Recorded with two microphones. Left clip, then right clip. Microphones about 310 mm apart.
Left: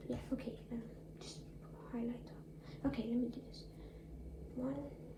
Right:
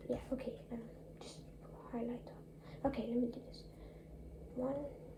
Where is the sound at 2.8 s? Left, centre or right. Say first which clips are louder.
Right 2 dB; right.